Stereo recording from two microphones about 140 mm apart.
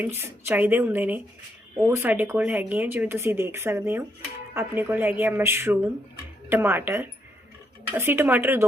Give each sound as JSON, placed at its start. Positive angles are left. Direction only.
{"t": 0.0, "sound": "speech", "side_deg": -15}